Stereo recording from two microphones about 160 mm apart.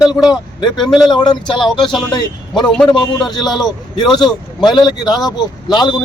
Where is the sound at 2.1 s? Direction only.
25° left (ahead or behind).